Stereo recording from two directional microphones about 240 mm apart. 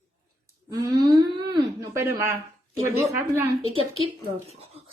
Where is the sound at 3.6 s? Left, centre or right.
Left.